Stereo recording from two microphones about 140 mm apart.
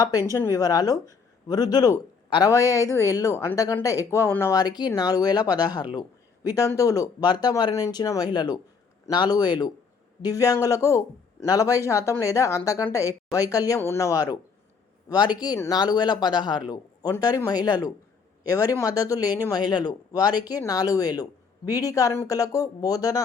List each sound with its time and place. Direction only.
0.0 s speech: 25° left (ahead or behind)
4.6 s speech: 30° left (ahead or behind)
5.9 s a sound: 30° left (ahead or behind)
6.7 s speech: 25° left (ahead or behind)
15.5 s speech: 20° left (ahead or behind)
15.8 s a man's voice: 30° left (ahead or behind)